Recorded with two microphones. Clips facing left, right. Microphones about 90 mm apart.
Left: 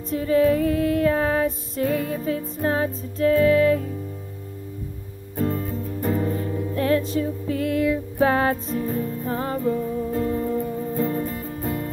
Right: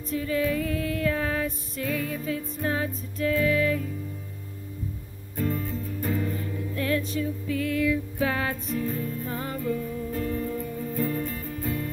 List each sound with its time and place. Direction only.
0.1 s music: 35° left (ahead or behind)
5.4 s music: 40° left (ahead or behind)